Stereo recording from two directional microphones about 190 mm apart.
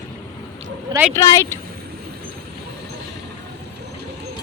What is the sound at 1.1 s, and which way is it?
Speech, 15° left (ahead or behind).